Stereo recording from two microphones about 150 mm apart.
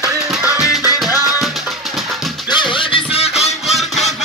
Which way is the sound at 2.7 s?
40° left (ahead or behind).